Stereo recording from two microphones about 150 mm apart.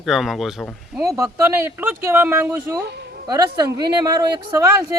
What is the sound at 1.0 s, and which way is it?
Speech, 20° right (ahead or behind).